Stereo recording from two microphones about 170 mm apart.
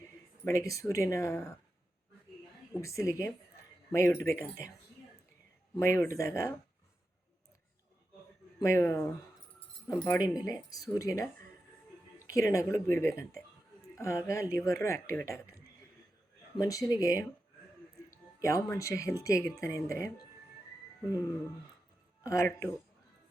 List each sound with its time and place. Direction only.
0.4 s speech: 20° left (ahead or behind)
2.8 s speech: 20° left (ahead or behind)
5.7 s speech: 15° left (ahead or behind)
8.6 s speech: 15° left (ahead or behind)
10.4 s speech: 20° left (ahead or behind)
12.3 s speech: 20° left (ahead or behind)
16.6 s speech: 20° left (ahead or behind)
18.4 s speech: 15° left (ahead or behind)